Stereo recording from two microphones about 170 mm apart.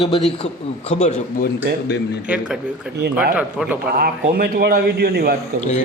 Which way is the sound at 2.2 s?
5° right (ahead or behind).